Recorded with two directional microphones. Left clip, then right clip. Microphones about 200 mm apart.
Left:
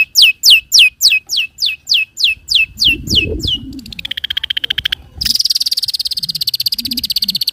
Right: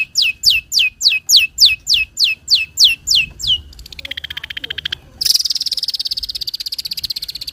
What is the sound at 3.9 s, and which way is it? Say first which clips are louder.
Frog: left 6 dB; 15° left (ahead or behind).